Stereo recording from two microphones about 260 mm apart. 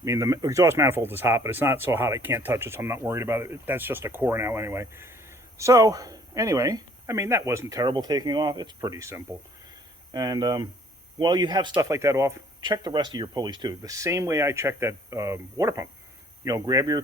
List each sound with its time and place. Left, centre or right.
0.0 s speech: centre